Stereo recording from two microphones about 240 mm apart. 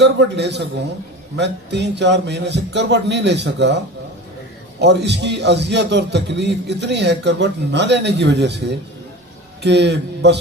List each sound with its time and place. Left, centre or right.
0.0 s a man's voice: right
4.8 s a man's voice: right